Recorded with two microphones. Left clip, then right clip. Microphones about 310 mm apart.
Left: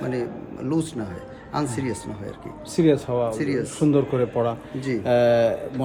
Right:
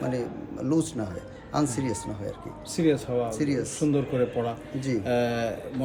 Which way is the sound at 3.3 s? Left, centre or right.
Centre.